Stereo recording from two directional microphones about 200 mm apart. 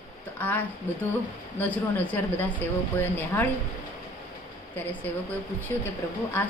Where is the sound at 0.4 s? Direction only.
10° left (ahead or behind).